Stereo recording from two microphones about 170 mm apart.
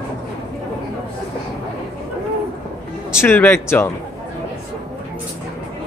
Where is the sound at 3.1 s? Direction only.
10° left (ahead or behind).